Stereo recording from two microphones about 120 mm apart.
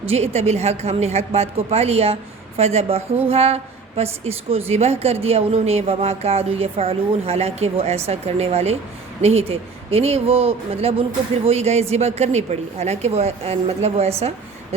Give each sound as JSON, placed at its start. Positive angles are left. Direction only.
{"t": 0.1, "sound": "a woman's voice", "side_deg": -60}